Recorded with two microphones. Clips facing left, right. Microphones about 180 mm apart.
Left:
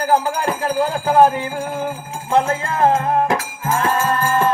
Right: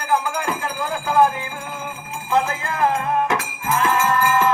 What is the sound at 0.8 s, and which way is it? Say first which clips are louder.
Speech: left 5 dB; 35° left (ahead or behind).